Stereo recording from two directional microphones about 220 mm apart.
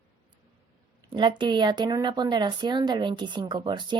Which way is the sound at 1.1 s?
20° right (ahead or behind).